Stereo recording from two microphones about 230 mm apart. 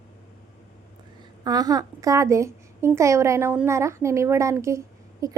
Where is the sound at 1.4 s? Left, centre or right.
Centre.